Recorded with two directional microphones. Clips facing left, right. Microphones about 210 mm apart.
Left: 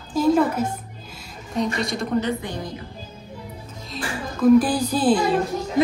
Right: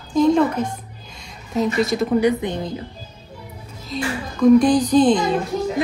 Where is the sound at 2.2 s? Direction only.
20° right (ahead or behind).